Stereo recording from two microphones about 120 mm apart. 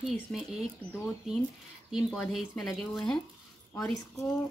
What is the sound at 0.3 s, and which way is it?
Speech, 10° left (ahead or behind).